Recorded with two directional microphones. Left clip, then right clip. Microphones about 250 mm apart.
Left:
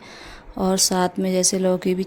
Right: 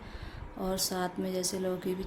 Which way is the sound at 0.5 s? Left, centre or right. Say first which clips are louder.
Left 13 dB; left.